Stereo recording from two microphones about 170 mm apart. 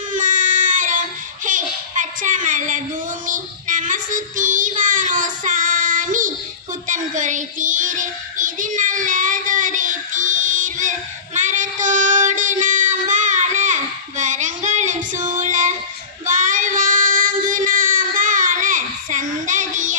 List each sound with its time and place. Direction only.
0.1 s child singing: 50° right (ahead or behind)
1.5 s a sound: 50° right (ahead or behind)
3.2 s child singing: 50° right (ahead or behind)